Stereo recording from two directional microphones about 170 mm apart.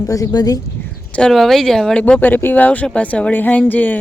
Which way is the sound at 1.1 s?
5° left (ahead or behind).